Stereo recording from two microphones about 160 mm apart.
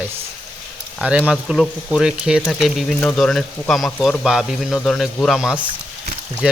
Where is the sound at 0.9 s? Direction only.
10° right (ahead or behind).